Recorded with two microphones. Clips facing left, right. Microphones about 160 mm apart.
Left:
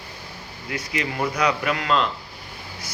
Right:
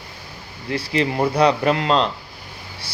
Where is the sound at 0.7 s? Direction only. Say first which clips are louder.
Right 7 dB; 30° right (ahead or behind).